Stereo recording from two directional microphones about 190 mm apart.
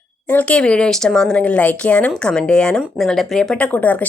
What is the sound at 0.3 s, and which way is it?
Speech, 10° left (ahead or behind).